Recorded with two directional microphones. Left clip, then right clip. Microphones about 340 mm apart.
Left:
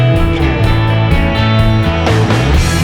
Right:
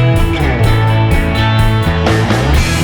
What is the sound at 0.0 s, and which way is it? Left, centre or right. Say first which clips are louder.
Music: left 1 dB; centre.